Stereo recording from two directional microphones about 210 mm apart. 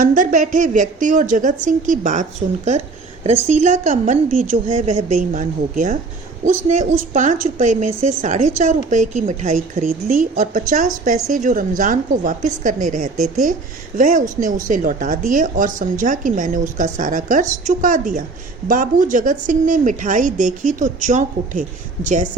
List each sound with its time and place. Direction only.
0.0 s a woman's voice: 35° right (ahead or behind)
3.4 s a woman's voice: 35° right (ahead or behind)